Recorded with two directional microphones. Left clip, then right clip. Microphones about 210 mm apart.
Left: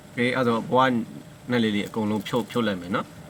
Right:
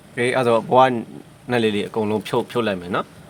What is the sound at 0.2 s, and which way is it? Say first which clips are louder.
Speech: right 6 dB; 55° right (ahead or behind).